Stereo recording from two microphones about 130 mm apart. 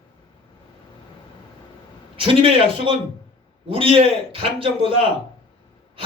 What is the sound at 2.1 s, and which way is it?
A man's voice, 45° right (ahead or behind).